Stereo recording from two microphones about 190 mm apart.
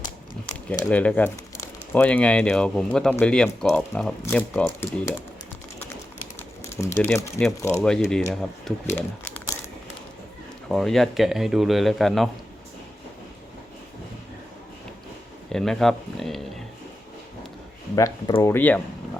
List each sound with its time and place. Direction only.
0.9 s speech: 5° left (ahead or behind)
6.7 s a man's voice: 15° left (ahead or behind)
10.7 s a man's voice: centre (ahead or behind)
15.5 s a man's voice: centre (ahead or behind)
17.9 s speech: 20° left (ahead or behind)
18.5 s speech: 10° left (ahead or behind)